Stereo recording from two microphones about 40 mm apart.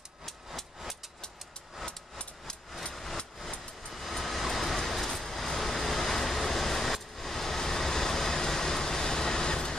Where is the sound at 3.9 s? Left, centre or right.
Centre.